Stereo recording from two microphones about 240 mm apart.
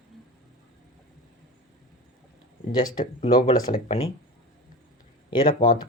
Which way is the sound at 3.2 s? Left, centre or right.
Left.